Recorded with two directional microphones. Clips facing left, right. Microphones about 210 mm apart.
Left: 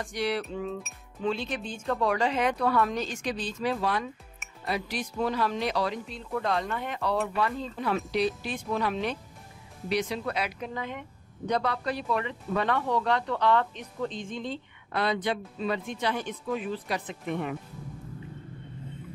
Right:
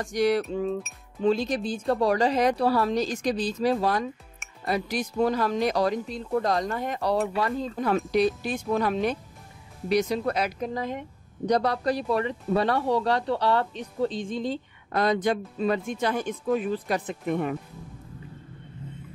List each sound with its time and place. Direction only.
0.0 s a woman's voice: 45° right (ahead or behind)